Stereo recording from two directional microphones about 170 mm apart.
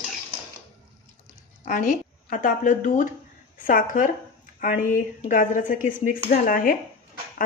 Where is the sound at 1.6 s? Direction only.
50° left (ahead or behind).